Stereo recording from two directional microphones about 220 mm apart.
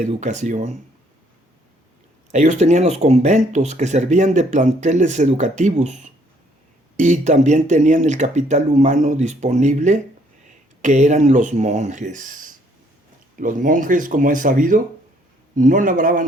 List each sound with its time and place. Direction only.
0.0 s speech: 35° right (ahead or behind)
2.3 s speech: 30° right (ahead or behind)